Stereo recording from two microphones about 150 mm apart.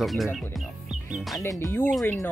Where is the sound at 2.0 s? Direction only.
20° left (ahead or behind).